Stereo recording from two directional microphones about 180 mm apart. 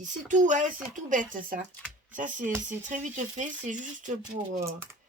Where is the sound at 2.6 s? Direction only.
45° right (ahead or behind).